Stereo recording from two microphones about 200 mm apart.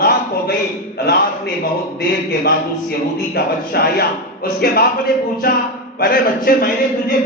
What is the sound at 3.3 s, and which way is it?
A man's voice, 50° left (ahead or behind).